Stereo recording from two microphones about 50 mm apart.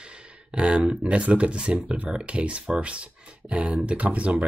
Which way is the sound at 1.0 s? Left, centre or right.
Right.